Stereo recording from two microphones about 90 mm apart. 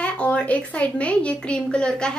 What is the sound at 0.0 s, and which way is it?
A woman's voice, 15° left (ahead or behind).